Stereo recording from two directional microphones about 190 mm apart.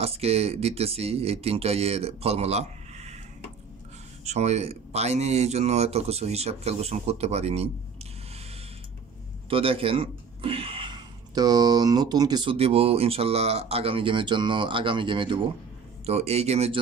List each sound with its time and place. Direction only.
0.0 s speech: 30° right (ahead or behind)
4.2 s speech: 35° right (ahead or behind)
9.5 s speech: 30° right (ahead or behind)